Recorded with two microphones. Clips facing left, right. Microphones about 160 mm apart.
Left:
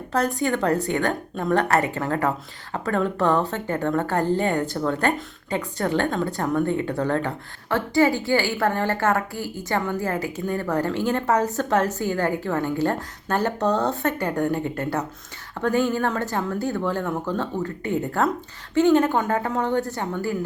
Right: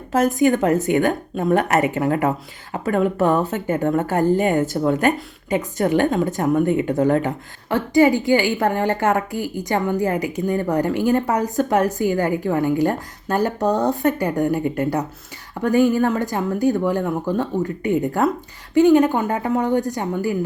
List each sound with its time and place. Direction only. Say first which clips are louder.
0.3 s a woman's voice: right 5 dB; 15° right (ahead or behind)